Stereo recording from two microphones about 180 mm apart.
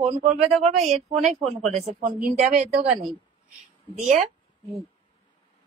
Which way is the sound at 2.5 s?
45° right (ahead or behind).